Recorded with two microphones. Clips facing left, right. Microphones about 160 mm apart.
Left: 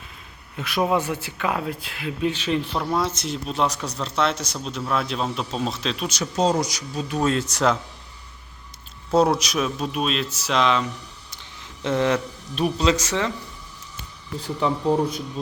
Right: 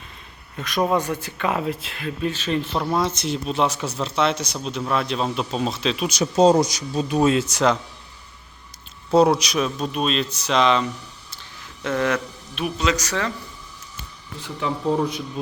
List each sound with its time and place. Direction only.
0.5 s speech: 10° left (ahead or behind)
2.0 s speech: 15° left (ahead or behind)
2.7 s speech: centre (ahead or behind)
6.1 s speech: 20° right (ahead or behind)
7.2 s speech: 5° right (ahead or behind)
9.1 s speech: centre (ahead or behind)
11.8 s speech: 25° left (ahead or behind)